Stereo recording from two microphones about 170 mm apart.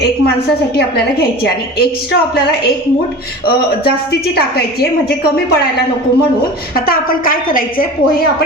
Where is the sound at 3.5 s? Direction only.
65° left (ahead or behind).